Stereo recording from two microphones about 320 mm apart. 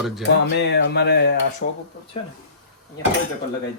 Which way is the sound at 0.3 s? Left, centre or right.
Left.